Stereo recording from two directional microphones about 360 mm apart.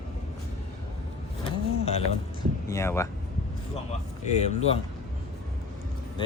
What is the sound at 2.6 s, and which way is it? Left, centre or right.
Speech, centre.